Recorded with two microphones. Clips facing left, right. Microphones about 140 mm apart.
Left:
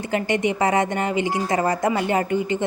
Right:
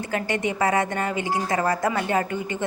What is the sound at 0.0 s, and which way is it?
A woman's voice, 15° left (ahead or behind).